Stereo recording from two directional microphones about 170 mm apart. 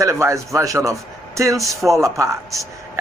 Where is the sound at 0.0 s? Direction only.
15° right (ahead or behind).